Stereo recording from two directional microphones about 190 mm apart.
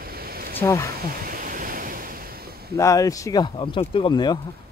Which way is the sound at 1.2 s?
45° right (ahead or behind).